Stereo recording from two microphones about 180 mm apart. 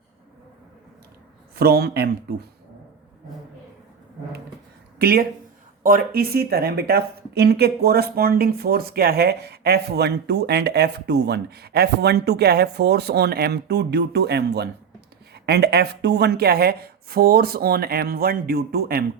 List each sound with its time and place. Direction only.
1.5 s speech: 60° right (ahead or behind)
4.9 s speech: 60° right (ahead or behind)